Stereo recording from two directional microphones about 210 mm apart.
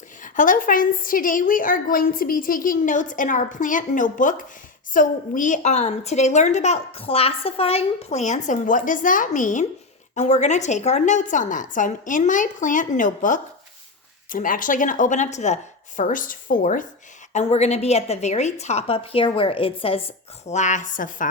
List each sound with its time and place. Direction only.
0.2 s a woman's voice: 40° left (ahead or behind)